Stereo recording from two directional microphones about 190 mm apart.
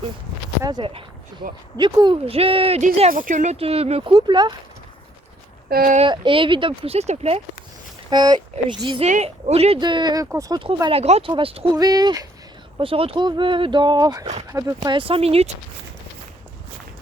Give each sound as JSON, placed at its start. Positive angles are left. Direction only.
{"t": 0.6, "sound": "speech", "side_deg": -25}
{"t": 3.1, "sound": "speech", "side_deg": -45}
{"t": 5.6, "sound": "speech", "side_deg": -50}
{"t": 6.0, "sound": "speech", "side_deg": -25}
{"t": 8.1, "sound": "speech", "side_deg": -20}
{"t": 9.0, "sound": "speech", "side_deg": -35}